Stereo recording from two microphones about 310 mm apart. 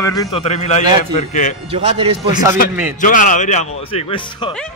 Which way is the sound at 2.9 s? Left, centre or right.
Left.